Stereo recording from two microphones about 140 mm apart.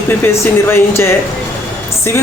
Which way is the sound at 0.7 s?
20° left (ahead or behind).